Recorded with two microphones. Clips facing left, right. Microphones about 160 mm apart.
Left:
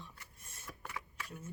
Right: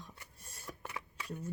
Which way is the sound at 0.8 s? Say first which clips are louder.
Even; 20° right (ahead or behind).